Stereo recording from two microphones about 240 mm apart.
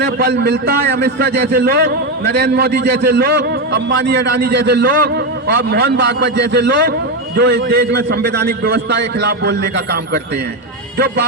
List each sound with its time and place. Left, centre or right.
0.0 s a man's voice: right